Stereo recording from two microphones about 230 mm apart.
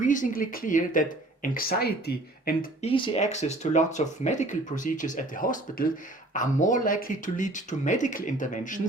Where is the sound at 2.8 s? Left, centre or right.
Left.